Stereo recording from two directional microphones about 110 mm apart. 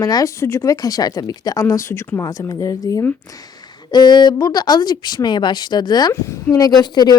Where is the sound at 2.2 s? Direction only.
30° left (ahead or behind).